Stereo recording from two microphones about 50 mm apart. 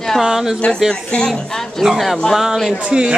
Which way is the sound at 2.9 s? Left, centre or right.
Centre.